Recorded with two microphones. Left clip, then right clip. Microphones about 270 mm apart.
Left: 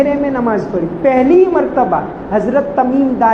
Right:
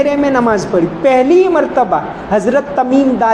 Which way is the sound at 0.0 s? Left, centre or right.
Right.